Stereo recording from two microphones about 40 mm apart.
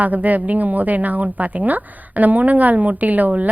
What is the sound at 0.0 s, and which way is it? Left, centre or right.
A woman's voice, right.